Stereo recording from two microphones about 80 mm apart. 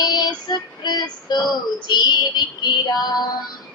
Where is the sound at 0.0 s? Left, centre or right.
Left.